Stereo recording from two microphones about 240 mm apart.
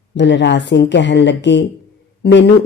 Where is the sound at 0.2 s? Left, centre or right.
Left.